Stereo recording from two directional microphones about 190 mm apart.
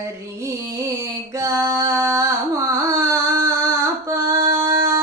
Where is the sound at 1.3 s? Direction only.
15° right (ahead or behind).